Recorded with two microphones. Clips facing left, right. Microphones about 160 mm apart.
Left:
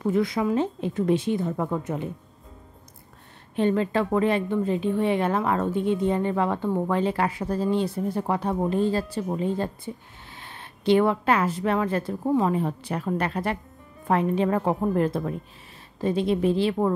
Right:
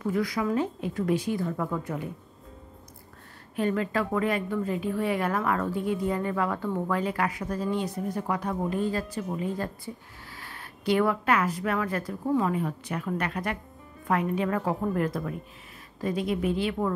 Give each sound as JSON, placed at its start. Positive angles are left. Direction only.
{"t": 0.0, "sound": "a woman's voice", "side_deg": 25}
{"t": 3.5, "sound": "a woman's voice", "side_deg": 25}